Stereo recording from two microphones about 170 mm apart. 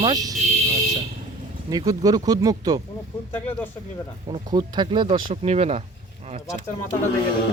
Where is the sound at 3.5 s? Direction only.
10° left (ahead or behind).